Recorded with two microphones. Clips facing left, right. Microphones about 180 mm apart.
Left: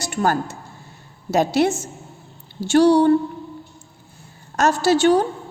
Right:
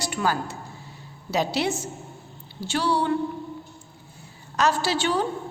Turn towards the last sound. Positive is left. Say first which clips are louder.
# left 9 dB
turn(degrees=45)  # may be behind; listen again after turning